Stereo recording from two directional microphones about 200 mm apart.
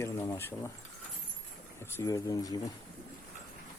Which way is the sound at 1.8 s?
15° left (ahead or behind).